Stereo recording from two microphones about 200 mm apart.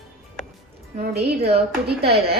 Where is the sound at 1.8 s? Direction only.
50° right (ahead or behind).